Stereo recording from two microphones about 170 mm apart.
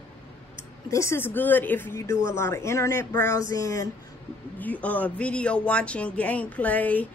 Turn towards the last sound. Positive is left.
turn(degrees=10)  # may be behind; listen again after turning